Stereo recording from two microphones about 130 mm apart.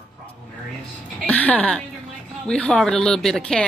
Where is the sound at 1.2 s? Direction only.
10° left (ahead or behind).